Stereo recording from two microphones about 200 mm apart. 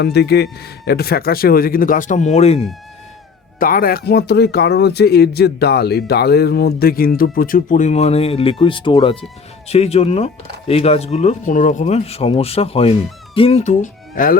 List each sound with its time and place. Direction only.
0.0 s speech: 55° left (ahead or behind); by 2.6 s 30° left (ahead or behind)
3.6 s speech: 45° left (ahead or behind)